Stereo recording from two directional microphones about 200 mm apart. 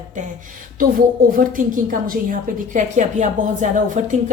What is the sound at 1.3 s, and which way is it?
A woman's voice, 45° right (ahead or behind).